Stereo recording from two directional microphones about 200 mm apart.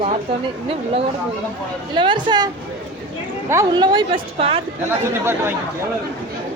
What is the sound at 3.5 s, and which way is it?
Speech, 20° right (ahead or behind).